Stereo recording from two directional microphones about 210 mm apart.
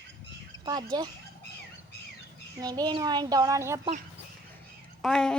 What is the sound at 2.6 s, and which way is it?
A child's voice, 20° right (ahead or behind).